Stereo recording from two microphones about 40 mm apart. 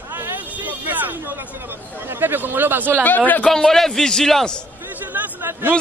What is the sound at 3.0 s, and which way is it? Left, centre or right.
Speech, left.